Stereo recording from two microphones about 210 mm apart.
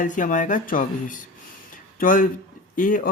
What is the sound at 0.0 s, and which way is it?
Speech, 40° left (ahead or behind).